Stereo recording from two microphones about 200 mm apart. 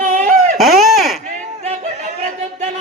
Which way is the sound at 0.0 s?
40° right (ahead or behind).